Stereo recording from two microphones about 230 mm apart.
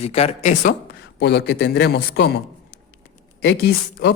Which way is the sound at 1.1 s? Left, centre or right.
Left.